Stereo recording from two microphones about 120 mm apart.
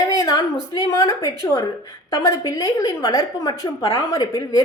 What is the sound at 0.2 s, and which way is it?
A woman's voice, 35° left (ahead or behind).